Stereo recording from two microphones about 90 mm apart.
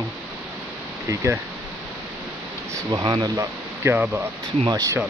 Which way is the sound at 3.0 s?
55° right (ahead or behind).